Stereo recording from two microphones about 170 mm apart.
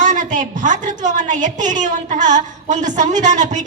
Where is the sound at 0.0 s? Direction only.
45° right (ahead or behind).